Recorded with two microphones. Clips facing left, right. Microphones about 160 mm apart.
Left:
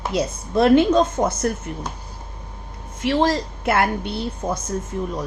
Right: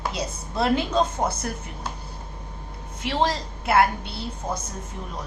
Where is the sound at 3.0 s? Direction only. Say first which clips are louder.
Left 5 dB; 50° left (ahead or behind).